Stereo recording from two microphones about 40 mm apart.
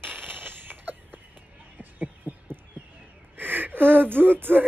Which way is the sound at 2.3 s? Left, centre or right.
Right.